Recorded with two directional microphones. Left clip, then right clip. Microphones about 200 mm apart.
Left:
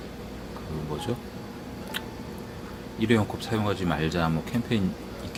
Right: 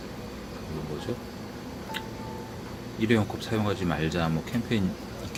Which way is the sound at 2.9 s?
5° left (ahead or behind).